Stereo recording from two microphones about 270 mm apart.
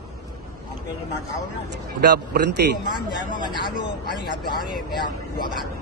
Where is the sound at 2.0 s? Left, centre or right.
Right.